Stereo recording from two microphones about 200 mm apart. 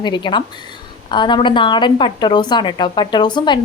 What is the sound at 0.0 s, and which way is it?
A woman's voice, 20° left (ahead or behind).